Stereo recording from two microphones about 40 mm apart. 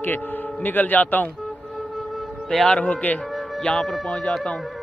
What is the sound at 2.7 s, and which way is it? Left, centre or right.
Speech, left.